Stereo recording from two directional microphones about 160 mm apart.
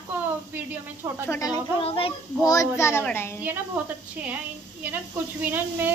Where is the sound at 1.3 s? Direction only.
20° left (ahead or behind).